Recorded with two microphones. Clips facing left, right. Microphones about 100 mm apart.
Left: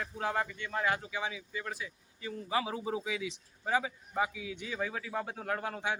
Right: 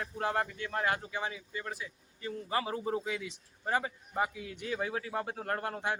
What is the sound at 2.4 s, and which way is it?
A man's voice, 5° left (ahead or behind).